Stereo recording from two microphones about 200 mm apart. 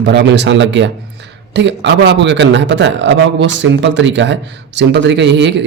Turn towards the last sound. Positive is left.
turn(degrees=-60)  # may be behind; listen again after turning